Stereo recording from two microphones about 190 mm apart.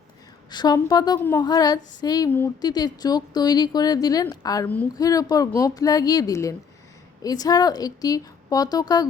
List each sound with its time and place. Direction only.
0.5 s speech: 20° left (ahead or behind)